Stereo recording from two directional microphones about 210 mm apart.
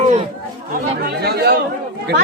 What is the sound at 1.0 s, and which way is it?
Speech, 50° right (ahead or behind).